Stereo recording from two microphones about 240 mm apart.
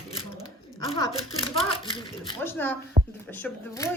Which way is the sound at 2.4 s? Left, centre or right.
Centre.